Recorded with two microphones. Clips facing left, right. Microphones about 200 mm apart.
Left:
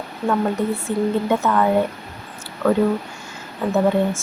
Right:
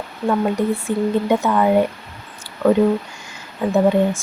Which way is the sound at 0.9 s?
15° right (ahead or behind).